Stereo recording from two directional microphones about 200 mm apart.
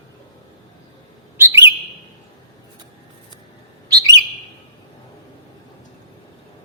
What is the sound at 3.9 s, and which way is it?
Bird, 20° right (ahead or behind).